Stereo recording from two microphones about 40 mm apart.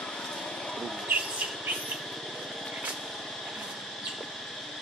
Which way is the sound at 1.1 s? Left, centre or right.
Right.